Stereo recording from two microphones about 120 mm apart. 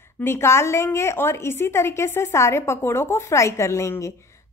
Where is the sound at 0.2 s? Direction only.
20° left (ahead or behind).